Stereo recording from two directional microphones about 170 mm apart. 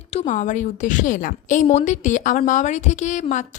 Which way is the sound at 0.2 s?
45° left (ahead or behind).